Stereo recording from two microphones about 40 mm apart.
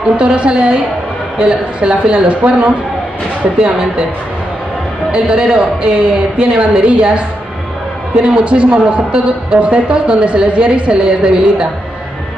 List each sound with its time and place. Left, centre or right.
0.4 s a man's voice: right
5.1 s a man's voice: right
8.2 s a man's voice: right